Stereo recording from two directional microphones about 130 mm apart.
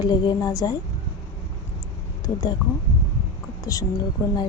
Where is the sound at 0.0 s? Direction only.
30° left (ahead or behind).